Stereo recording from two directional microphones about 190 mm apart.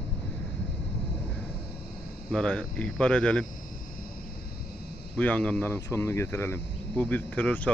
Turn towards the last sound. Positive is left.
turn(degrees=10)  # may be behind; listen again after turning